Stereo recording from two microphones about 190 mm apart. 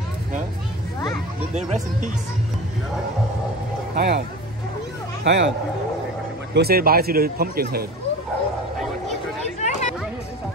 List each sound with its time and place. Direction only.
1.5 s speech: 40° right (ahead or behind)
3.9 s speech: 55° right (ahead or behind)
5.2 s speech: 65° right (ahead or behind)
6.5 s speech: 55° right (ahead or behind)
9.6 s a sound: 40° left (ahead or behind)